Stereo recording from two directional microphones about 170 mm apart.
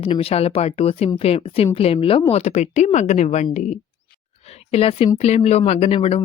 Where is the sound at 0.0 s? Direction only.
35° left (ahead or behind).